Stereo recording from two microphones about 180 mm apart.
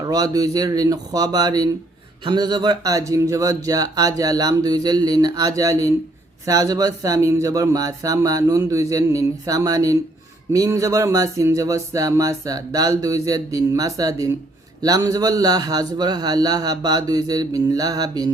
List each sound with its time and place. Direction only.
0.0 s speech: 20° right (ahead or behind)